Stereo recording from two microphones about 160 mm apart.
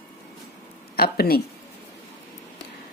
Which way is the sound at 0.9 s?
75° left (ahead or behind).